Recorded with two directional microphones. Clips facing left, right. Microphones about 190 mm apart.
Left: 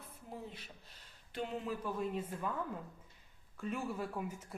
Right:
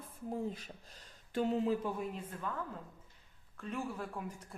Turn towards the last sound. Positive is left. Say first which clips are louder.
# left 2 dB
turn(degrees=5)  # may be behind; listen again after turning